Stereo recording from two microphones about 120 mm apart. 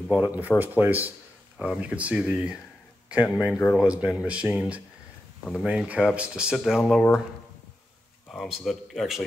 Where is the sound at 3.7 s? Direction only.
5° right (ahead or behind).